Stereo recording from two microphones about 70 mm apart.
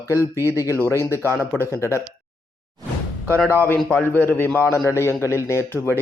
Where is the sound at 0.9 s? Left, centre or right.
Left.